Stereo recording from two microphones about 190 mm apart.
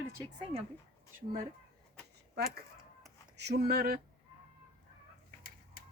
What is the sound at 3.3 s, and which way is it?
Speech, 60° right (ahead or behind).